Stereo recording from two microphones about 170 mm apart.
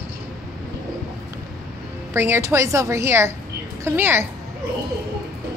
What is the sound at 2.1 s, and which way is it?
A woman's voice, 15° right (ahead or behind).